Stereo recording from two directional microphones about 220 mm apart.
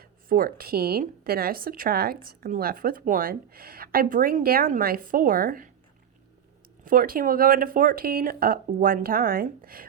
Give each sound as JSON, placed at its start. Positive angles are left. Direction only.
{"t": 0.0, "sound": "a woman's voice", "side_deg": -40}
{"t": 6.8, "sound": "speech", "side_deg": -40}